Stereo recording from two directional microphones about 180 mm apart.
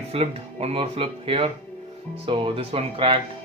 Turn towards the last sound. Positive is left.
turn(degrees=-30)  # may be behind; listen again after turning